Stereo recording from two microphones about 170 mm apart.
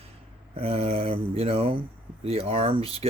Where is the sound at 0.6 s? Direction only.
35° right (ahead or behind).